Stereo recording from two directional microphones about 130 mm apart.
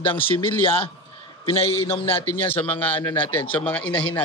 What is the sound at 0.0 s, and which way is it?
Speech, 45° left (ahead or behind).